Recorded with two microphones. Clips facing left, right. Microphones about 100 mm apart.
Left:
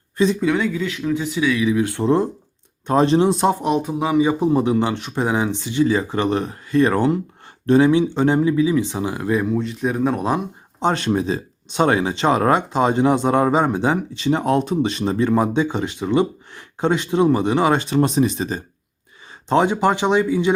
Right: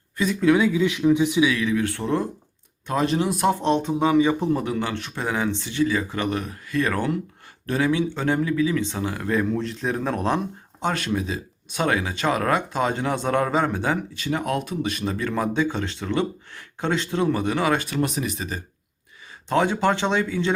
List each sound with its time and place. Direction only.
0.4 s speech: 10° right (ahead or behind)
1.6 s speech: 20° left (ahead or behind)
3.6 s speech: 10° left (ahead or behind)
9.6 s speech: centre (ahead or behind)
10.8 s speech: 25° left (ahead or behind)